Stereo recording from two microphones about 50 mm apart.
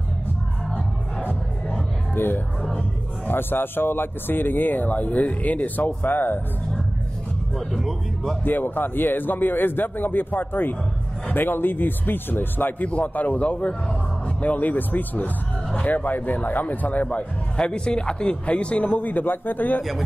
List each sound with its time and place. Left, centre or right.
2.1 s speech: left
7.5 s speech: centre
8.5 s speech: left